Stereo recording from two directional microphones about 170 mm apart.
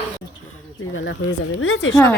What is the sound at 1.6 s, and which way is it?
Speech, 90° left.